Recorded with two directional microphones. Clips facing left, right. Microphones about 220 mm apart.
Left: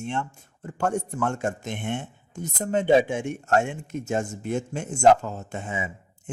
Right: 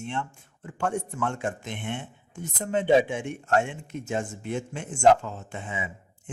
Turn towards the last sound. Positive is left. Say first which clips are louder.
# left 3 dB
turn(degrees=45)  # may be behind; listen again after turning